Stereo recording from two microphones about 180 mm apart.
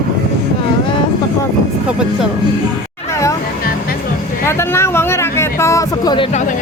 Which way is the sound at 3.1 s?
15° left (ahead or behind).